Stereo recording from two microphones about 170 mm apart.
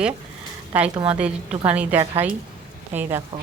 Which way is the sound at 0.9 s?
35° right (ahead or behind).